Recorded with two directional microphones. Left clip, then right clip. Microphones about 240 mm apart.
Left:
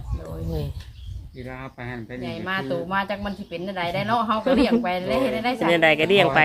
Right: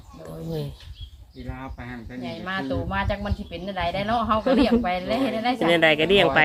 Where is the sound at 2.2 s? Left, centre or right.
Centre.